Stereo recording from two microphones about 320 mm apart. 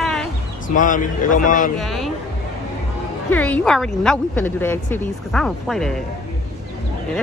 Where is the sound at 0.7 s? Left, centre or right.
Left.